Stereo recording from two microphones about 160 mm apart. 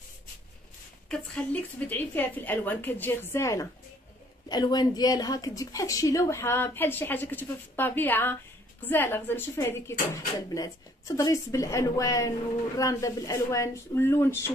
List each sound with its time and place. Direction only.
1.0 s a woman's voice: 10° left (ahead or behind)